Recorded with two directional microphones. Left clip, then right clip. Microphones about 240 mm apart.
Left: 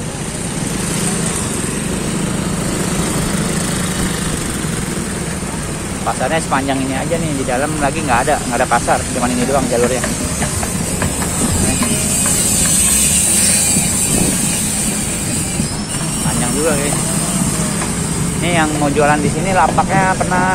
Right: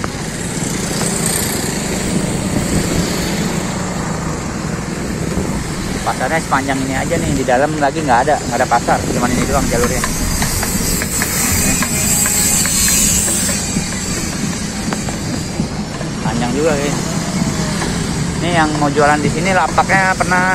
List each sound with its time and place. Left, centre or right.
6.3 s speech: centre
7.4 s speech: centre
8.3 s speech: centre
18.4 s speech: centre